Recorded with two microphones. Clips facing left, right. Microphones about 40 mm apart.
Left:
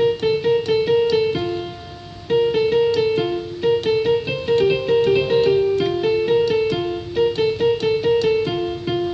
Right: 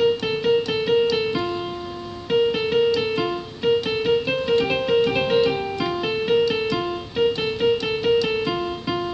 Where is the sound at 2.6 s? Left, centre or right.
Right.